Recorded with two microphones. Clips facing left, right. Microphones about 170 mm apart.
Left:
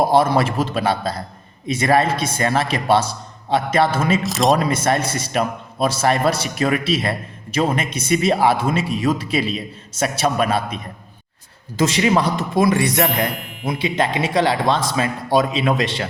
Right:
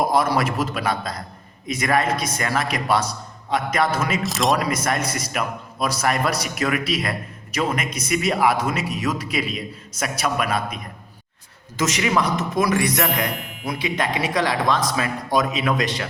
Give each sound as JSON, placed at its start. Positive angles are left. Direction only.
{"t": 0.0, "sound": "a man's voice", "side_deg": 30}
{"t": 4.2, "sound": "speech", "side_deg": 0}
{"t": 4.5, "sound": "a man's voice", "side_deg": 30}
{"t": 11.8, "sound": "a man's voice", "side_deg": 30}
{"t": 13.3, "sound": "ding", "side_deg": 0}
{"t": 13.7, "sound": "a man's voice", "side_deg": 25}